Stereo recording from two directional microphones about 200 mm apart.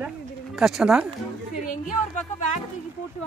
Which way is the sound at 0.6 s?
Centre (ahead or behind).